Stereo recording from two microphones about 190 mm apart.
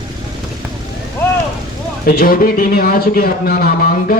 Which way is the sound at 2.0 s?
50° left (ahead or behind).